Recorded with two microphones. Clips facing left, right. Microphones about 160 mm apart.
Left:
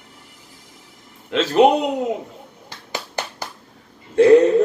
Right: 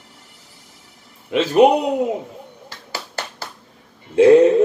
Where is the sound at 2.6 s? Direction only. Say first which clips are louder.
Left 3 dB; 15° left (ahead or behind).